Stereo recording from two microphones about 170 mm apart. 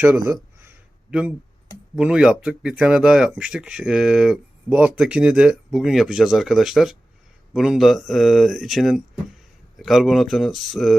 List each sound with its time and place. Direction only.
2.0 s speech: 5° right (ahead or behind)